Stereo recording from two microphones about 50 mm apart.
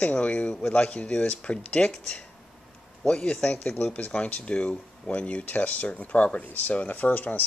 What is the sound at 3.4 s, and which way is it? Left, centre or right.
Speech, left.